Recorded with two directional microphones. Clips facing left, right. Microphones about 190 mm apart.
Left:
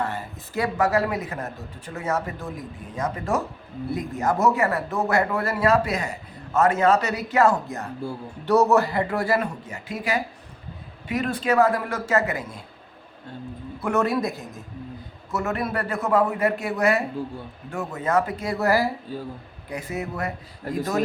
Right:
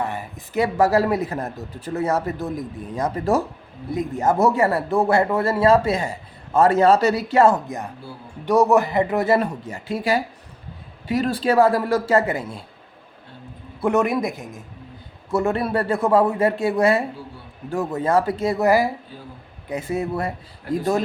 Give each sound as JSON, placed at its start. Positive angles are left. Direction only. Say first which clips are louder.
{"t": 0.0, "sound": "speech", "louder": "right 1 dB", "side_deg": -15}
{"t": 0.8, "sound": "a man's voice", "louder": "right 5 dB", "side_deg": -35}
{"t": 13.8, "sound": "a man's voice", "louder": "right 3 dB", "side_deg": -15}
{"t": 15.3, "sound": "a man's voice", "louder": "right 6 dB", "side_deg": -30}
{"t": 19.7, "sound": "a man's voice", "louder": "right 6 dB", "side_deg": -30}
{"t": 20.7, "sound": "speech", "louder": "right 4 dB", "side_deg": 40}